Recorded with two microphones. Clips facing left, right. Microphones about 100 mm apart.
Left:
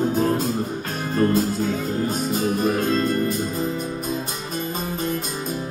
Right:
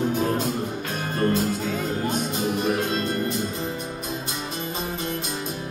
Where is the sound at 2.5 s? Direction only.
45° left (ahead or behind).